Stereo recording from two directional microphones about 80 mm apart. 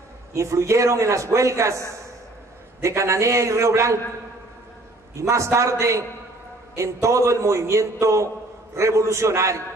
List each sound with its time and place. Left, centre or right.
0.3 s a man's voice: right
5.1 s a man's voice: right